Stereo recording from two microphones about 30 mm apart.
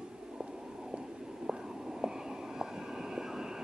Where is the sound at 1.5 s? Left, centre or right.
Right.